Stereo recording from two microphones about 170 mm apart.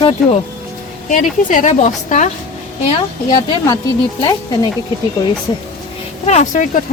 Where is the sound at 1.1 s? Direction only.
45° left (ahead or behind).